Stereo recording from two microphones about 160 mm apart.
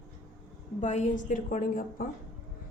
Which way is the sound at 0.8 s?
45° left (ahead or behind).